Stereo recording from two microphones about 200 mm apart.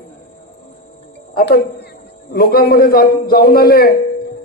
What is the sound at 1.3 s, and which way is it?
A man's voice, 50° left (ahead or behind).